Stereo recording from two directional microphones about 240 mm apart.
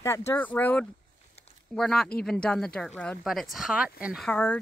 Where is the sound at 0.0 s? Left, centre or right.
Centre.